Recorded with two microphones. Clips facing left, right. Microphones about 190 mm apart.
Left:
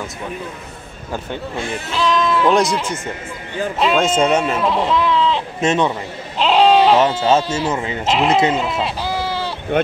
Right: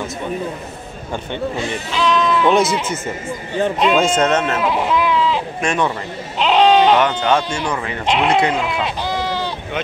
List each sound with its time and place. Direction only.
1.9 s a man's voice: centre (ahead or behind)
4.6 s sheep: centre (ahead or behind)
5.6 s speech: 20° left (ahead or behind)
6.3 s goat: centre (ahead or behind)
7.4 s speech: 5° left (ahead or behind)
8.5 s sheep: centre (ahead or behind)